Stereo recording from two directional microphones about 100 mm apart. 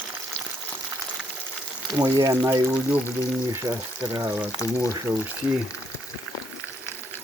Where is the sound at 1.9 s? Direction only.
40° right (ahead or behind).